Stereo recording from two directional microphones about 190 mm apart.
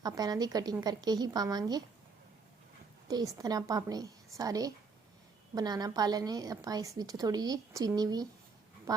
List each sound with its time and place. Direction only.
0.0 s a woman's voice: 20° right (ahead or behind)
3.1 s a woman's voice: 20° right (ahead or behind)